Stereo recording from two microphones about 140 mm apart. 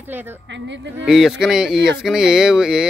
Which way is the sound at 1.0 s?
5° right (ahead or behind).